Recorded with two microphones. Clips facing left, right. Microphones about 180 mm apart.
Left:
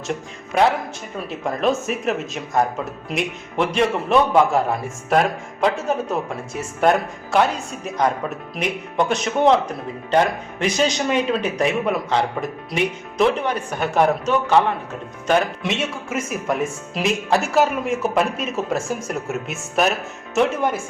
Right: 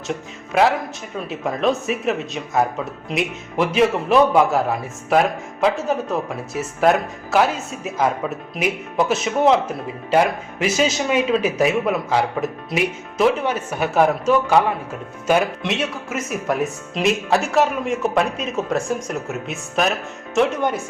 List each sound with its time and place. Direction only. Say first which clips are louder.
0.1 s a man's voice: right 1 dB; centre (ahead or behind)